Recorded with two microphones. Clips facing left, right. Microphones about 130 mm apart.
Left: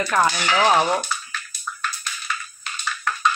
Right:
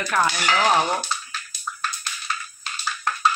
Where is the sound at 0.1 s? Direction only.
15° left (ahead or behind).